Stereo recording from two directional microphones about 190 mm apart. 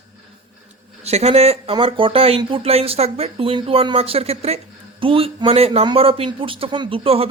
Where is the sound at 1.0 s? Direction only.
35° right (ahead or behind).